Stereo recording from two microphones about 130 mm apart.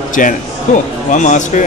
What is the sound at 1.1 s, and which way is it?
Speech, 75° left (ahead or behind).